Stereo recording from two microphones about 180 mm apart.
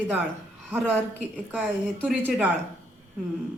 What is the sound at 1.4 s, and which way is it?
A woman's voice, 10° right (ahead or behind).